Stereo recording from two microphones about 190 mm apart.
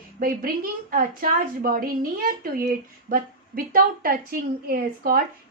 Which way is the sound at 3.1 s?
50° right (ahead or behind).